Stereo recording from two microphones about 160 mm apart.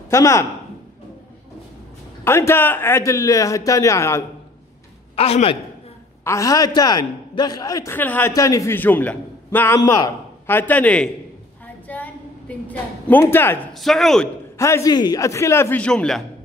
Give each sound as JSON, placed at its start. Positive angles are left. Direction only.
{"t": 0.1, "sound": "a man's voice", "side_deg": 20}
{"t": 2.2, "sound": "a man's voice", "side_deg": 15}
{"t": 5.1, "sound": "a man's voice", "side_deg": 40}
{"t": 6.2, "sound": "a man's voice", "side_deg": 20}
{"t": 11.6, "sound": "a sound", "side_deg": 10}
{"t": 13.7, "sound": "a man's voice", "side_deg": 0}
{"t": 14.6, "sound": "a man's voice", "side_deg": 20}